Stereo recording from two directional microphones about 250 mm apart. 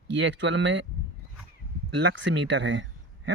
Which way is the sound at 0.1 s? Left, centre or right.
Right.